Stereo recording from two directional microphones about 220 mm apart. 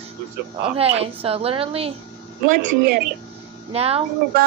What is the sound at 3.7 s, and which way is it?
Speech, 25° right (ahead or behind).